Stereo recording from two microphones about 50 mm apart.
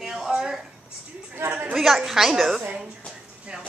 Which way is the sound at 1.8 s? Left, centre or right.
Centre.